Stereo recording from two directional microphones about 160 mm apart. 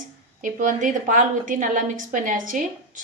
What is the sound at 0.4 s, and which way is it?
A woman's voice, 55° right (ahead or behind).